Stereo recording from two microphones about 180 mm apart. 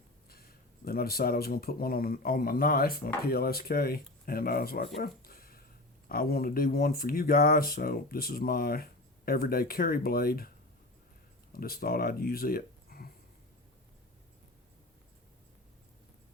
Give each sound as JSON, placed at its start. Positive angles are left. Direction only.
{"t": 0.3, "sound": "speech", "side_deg": 60}
{"t": 4.9, "sound": "a sound", "side_deg": 55}
{"t": 6.1, "sound": "speech", "side_deg": 55}
{"t": 11.5, "sound": "speech", "side_deg": 55}